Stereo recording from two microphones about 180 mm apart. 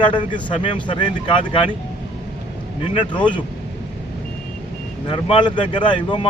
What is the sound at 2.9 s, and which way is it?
Speech, 25° left (ahead or behind).